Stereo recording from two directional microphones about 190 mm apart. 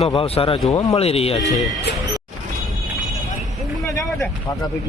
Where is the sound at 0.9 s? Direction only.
30° left (ahead or behind).